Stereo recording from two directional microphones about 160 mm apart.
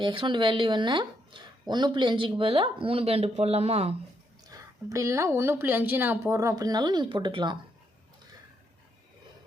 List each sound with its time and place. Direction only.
0.0 s speech: 30° right (ahead or behind)
4.5 s a sound: 20° right (ahead or behind)
4.9 s speech: 20° right (ahead or behind)